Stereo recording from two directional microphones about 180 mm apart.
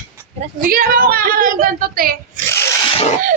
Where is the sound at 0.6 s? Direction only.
55° right (ahead or behind).